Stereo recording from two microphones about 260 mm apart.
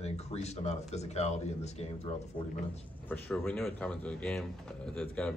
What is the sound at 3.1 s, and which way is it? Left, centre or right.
Speech, centre.